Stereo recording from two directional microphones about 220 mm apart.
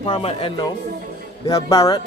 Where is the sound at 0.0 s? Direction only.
25° left (ahead or behind).